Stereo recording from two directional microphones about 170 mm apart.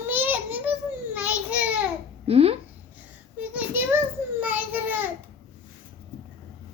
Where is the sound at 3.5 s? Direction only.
10° right (ahead or behind).